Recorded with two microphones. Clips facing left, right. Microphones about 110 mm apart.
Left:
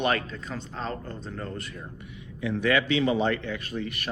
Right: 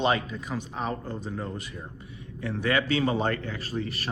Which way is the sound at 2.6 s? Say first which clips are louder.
Left 1 dB; 35° right (ahead or behind).